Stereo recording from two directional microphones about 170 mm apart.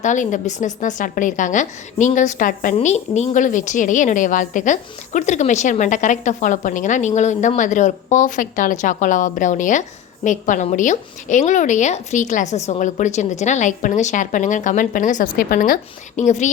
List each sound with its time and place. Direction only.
0.0 s a woman's voice: 45° left (ahead or behind)